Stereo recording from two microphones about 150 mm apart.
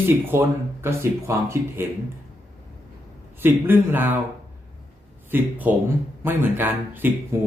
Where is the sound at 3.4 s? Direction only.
15° right (ahead or behind).